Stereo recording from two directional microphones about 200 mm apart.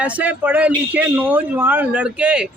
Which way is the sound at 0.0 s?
5° right (ahead or behind).